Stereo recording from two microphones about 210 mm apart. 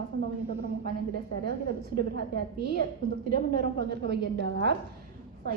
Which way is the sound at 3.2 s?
50° right (ahead or behind).